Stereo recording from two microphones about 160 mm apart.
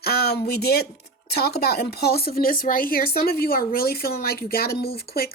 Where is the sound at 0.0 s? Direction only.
80° left.